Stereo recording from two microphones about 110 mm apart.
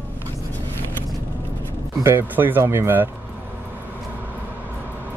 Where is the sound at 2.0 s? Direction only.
20° right (ahead or behind).